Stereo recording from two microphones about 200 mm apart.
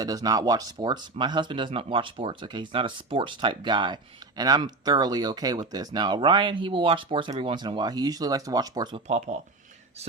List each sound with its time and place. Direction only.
0.0 s speech: 20° right (ahead or behind)
9.0 s speech: 35° right (ahead or behind)